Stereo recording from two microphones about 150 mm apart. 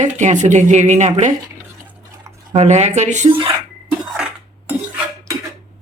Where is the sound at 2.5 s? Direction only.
50° right (ahead or behind).